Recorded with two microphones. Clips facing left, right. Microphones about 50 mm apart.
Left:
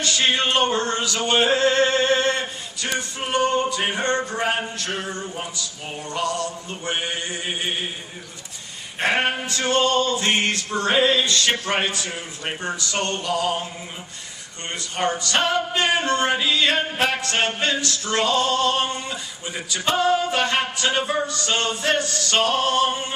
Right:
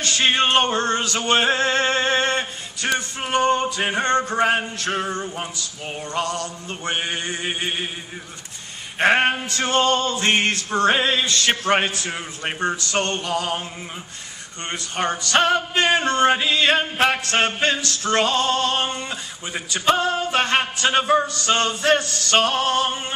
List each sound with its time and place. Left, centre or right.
0.0 s male singing: right
1.3 s music: right
2.8 s male singing: right
9.0 s male singing: right
14.9 s male singing: right